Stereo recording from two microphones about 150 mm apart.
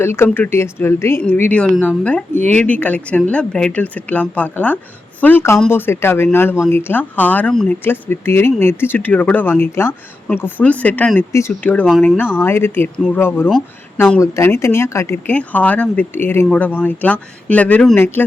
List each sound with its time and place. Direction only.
0.0 s speech: 15° left (ahead or behind)